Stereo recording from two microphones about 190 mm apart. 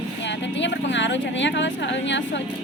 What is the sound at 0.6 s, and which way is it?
Speech, 70° left (ahead or behind).